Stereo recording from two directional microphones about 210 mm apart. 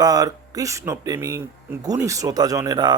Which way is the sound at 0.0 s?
15° right (ahead or behind).